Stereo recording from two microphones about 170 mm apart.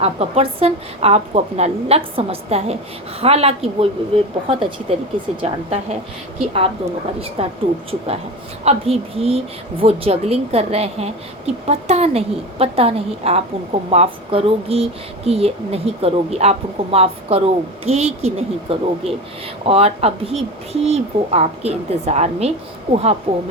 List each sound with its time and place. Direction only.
0.0 s speech: 35° right (ahead or behind)
7.4 s speech: 35° right (ahead or behind)